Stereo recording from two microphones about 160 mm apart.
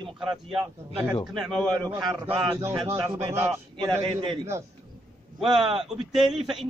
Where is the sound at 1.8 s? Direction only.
25° right (ahead or behind).